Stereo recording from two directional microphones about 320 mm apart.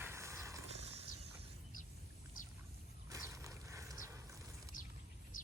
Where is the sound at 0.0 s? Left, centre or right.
Centre.